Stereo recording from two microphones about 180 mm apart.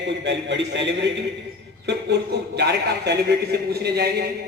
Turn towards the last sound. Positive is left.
turn(degrees=-65)  # may be behind; listen again after turning